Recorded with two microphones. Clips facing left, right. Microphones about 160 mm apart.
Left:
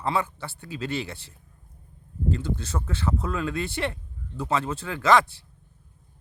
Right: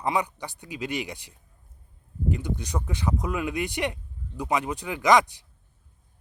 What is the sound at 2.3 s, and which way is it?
Speech, 15° right (ahead or behind).